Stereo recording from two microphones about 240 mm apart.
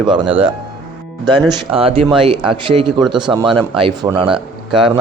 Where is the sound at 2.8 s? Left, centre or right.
Centre.